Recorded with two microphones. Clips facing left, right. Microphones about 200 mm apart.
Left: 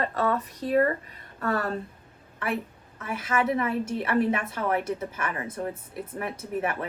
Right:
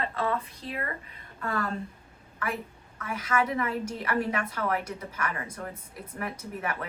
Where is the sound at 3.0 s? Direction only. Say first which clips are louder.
Left 1 dB; 25° left (ahead or behind).